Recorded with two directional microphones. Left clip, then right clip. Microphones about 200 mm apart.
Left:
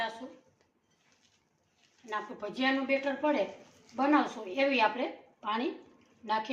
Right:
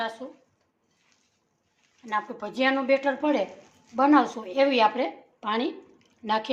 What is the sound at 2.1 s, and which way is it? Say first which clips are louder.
A woman's voice: right 7 dB; 55° right (ahead or behind).